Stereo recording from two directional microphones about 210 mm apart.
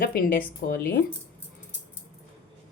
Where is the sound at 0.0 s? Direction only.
45° left (ahead or behind).